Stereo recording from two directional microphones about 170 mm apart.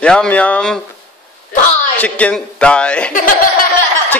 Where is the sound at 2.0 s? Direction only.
5° left (ahead or behind).